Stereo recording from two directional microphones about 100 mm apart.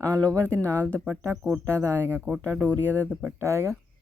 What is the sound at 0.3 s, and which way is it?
Speech, 25° right (ahead or behind).